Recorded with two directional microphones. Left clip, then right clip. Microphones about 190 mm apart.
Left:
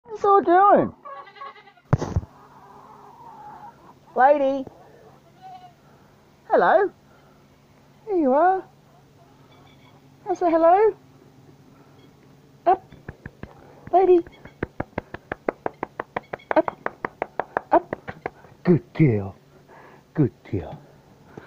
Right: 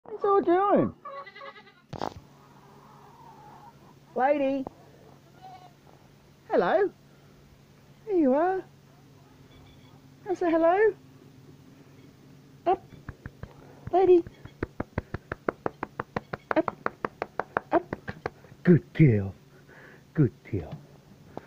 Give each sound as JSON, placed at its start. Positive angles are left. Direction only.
{"t": 0.2, "sound": "speech", "side_deg": -5}
{"t": 4.1, "sound": "a woman's voice", "side_deg": -15}
{"t": 6.4, "sound": "speech", "side_deg": -20}
{"t": 8.1, "sound": "speech", "side_deg": -10}
{"t": 10.2, "sound": "speech", "side_deg": -10}
{"t": 13.0, "sound": "a sound", "side_deg": 5}